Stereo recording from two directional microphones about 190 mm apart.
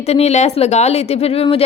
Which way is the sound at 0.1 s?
35° left (ahead or behind).